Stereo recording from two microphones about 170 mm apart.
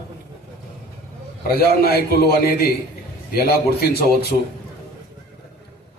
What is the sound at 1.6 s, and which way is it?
A man's voice, 65° left (ahead or behind).